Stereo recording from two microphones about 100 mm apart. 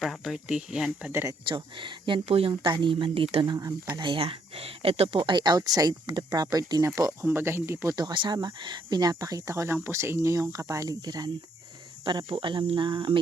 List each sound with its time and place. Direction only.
0.0 s a sound: centre (ahead or behind)
0.4 s speech: 10° right (ahead or behind)
1.1 s speech: 30° right (ahead or behind)
1.5 s speech: 55° right (ahead or behind)
2.2 s speech: 75° right (ahead or behind)
2.5 s speech: 50° right (ahead or behind)
3.4 s speech: 40° right (ahead or behind)
4.1 s speech: 70° right (ahead or behind); by 6.9 s 40° right (ahead or behind)
6.9 s speech: 30° right (ahead or behind)
7.9 s speech: 50° right (ahead or behind)
12.0 s speech: 50° right (ahead or behind)